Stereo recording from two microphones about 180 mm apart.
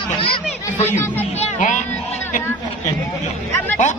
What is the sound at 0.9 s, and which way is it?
Speech, 10° left (ahead or behind).